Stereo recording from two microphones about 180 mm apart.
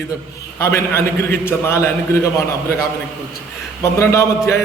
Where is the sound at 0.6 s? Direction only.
15° left (ahead or behind).